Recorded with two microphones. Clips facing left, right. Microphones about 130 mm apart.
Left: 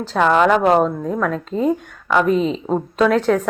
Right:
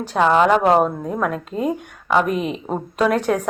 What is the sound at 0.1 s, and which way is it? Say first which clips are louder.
Speech: even; 20° right (ahead or behind).